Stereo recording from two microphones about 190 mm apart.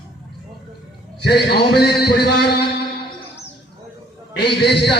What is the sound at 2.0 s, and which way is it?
Music, 55° left (ahead or behind).